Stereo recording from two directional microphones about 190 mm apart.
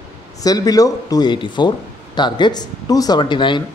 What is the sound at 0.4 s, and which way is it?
Speech, 20° left (ahead or behind).